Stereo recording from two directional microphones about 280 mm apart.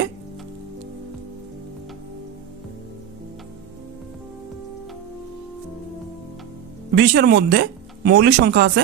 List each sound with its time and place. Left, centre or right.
6.9 s speech: right